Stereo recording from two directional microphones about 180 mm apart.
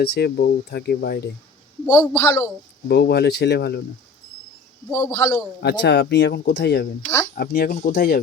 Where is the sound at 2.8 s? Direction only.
65° left (ahead or behind).